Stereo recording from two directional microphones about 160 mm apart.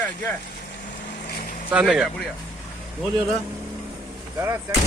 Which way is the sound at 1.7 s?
5° right (ahead or behind).